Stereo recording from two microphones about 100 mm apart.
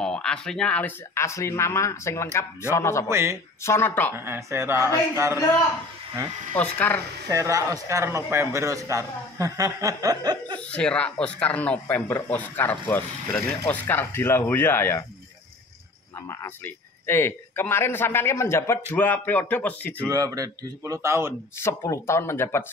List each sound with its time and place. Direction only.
0.0 s speech: 10° left (ahead or behind)
1.1 s speech: 30° left (ahead or behind)
3.1 s a man's voice: 25° right (ahead or behind)
3.6 s speech: 25° left (ahead or behind)
4.1 s a man's voice: 25° right (ahead or behind)
6.5 s speech: 20° left (ahead or behind)
7.2 s a man's voice: 35° right (ahead or behind)
10.6 s speech: 10° left (ahead or behind)
16.2 s speech: 25° left (ahead or behind)
20.1 s a man's voice: 35° right (ahead or behind)
21.5 s speech: 25° left (ahead or behind)